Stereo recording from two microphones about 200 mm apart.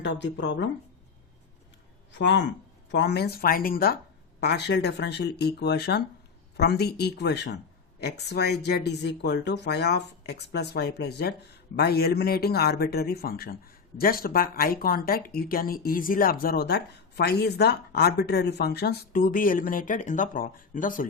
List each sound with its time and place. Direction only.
0.0 s speech: 60° left (ahead or behind)
2.1 s speech: 60° left (ahead or behind); by 21.1 s 40° left (ahead or behind)